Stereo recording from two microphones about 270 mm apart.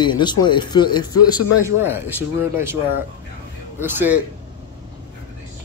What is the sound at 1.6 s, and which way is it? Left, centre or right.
Speech, centre.